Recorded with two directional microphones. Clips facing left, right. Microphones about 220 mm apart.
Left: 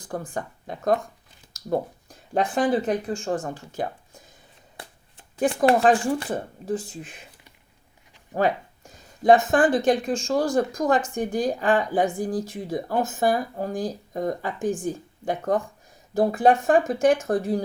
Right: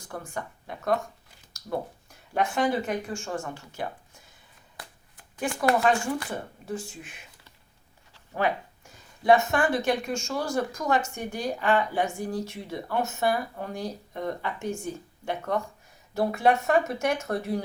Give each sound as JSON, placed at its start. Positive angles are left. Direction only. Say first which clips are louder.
{"t": 0.1, "sound": "speech", "louder": "left 5 dB", "side_deg": 35}
{"t": 4.8, "sound": "a sound", "louder": "left 3 dB", "side_deg": 30}
{"t": 5.6, "sound": "speech", "louder": "left 4 dB", "side_deg": 35}
{"t": 8.3, "sound": "a sound", "louder": "left 4 dB", "side_deg": 35}
{"t": 9.6, "sound": "speech", "louder": "left 5 dB", "side_deg": 35}
{"t": 10.9, "sound": "a woman's voice", "louder": "even", "side_deg": 50}
{"t": 11.4, "sound": "speech", "louder": "right 1 dB", "side_deg": 35}